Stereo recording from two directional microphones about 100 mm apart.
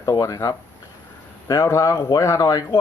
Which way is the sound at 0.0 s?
35° left (ahead or behind).